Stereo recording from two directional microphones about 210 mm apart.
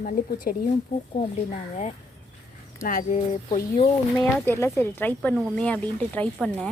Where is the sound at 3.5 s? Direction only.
30° left (ahead or behind).